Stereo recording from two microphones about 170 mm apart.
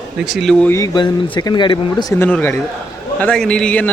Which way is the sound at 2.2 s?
10° left (ahead or behind).